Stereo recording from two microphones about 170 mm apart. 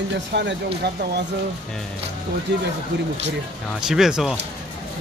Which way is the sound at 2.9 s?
90° right.